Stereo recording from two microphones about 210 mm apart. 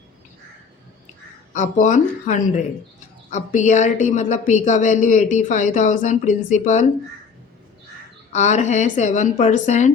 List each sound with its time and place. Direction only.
1.5 s a woman's voice: 35° left (ahead or behind)
8.3 s a woman's voice: 35° left (ahead or behind)